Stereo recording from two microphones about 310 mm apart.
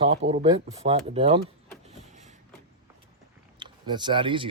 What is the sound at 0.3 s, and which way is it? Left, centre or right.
Speech, centre.